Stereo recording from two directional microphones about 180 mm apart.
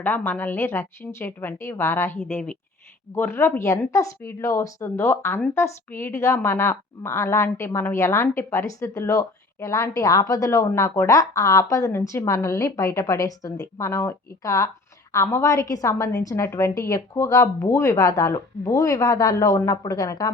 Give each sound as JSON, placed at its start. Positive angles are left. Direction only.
{"t": 0.0, "sound": "a woman's voice", "side_deg": 10}